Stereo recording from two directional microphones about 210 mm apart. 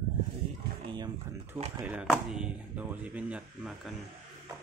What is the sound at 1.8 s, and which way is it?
Speech, 5° right (ahead or behind).